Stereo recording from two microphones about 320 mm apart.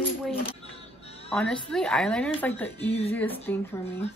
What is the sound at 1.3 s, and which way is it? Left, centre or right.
Speech, centre.